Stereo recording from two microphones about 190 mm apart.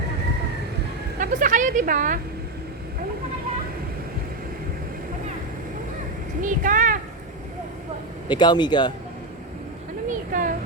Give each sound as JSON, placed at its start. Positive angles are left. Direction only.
{"t": 1.2, "sound": "a woman's voice", "side_deg": -45}
{"t": 6.4, "sound": "a child's voice", "side_deg": -45}
{"t": 8.3, "sound": "speech", "side_deg": 25}
{"t": 10.1, "sound": "a sound", "side_deg": -45}